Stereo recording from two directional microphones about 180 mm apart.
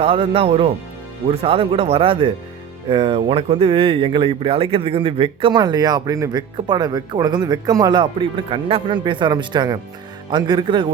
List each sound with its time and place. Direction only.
0.0 s speech: 30° right (ahead or behind)